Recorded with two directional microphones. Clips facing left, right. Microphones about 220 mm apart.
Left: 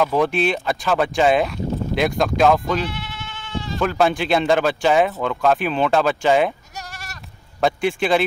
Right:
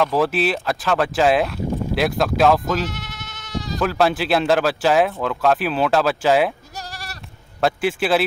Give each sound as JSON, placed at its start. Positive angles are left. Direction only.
{"t": 0.0, "sound": "speech", "side_deg": -5}
{"t": 2.9, "sound": "sheep", "side_deg": -45}
{"t": 3.8, "sound": "speech", "side_deg": 0}
{"t": 6.7, "sound": "goat", "side_deg": -35}
{"t": 7.6, "sound": "speech", "side_deg": -5}